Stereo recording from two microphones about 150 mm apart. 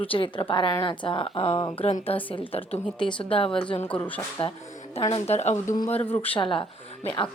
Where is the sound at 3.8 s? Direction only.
10° left (ahead or behind).